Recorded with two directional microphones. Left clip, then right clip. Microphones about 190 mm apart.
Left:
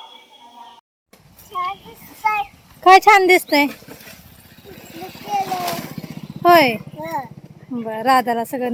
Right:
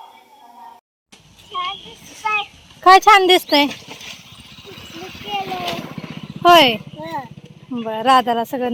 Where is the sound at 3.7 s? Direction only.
55° left (ahead or behind); by 5.3 s 35° left (ahead or behind).